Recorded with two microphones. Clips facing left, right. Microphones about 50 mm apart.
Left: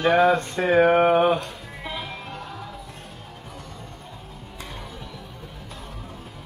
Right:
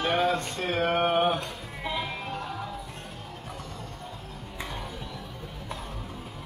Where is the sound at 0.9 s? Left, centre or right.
Left.